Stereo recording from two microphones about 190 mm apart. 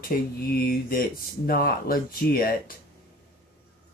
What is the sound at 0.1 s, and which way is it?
Speech, 50° left (ahead or behind).